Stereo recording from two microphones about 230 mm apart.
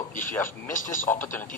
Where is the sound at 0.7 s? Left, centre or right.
Left.